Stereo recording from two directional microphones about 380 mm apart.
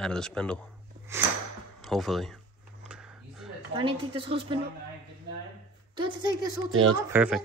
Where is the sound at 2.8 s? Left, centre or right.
Centre.